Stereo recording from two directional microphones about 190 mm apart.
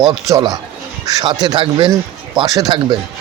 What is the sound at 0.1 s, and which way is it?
Speech, 20° right (ahead or behind).